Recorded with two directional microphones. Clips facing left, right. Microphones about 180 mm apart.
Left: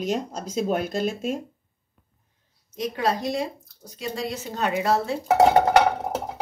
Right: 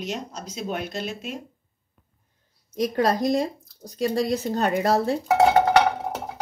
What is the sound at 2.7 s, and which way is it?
Speech, 40° right (ahead or behind).